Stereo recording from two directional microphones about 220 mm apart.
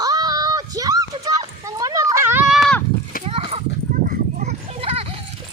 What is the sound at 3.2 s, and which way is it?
Clip-clop, 25° right (ahead or behind).